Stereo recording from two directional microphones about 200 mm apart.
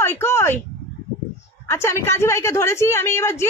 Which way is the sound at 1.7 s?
10° left (ahead or behind).